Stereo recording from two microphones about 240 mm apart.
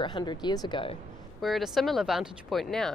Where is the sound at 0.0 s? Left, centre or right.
Centre.